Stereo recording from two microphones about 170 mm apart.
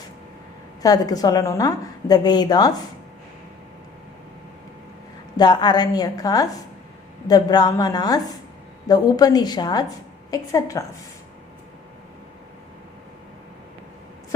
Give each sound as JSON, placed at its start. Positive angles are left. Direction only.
{"t": 0.8, "sound": "a woman's voice", "side_deg": 20}
{"t": 5.4, "sound": "a woman's voice", "side_deg": 25}